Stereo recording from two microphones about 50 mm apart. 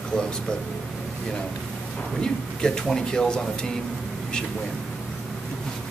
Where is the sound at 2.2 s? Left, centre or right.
Centre.